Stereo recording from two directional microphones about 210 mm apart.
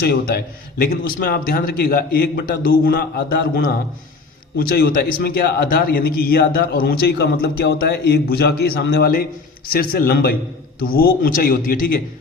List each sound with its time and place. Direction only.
0.0 s a man's voice: 50° left (ahead or behind)